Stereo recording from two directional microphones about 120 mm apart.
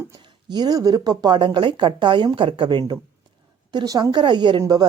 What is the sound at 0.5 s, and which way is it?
Speech, 35° right (ahead or behind).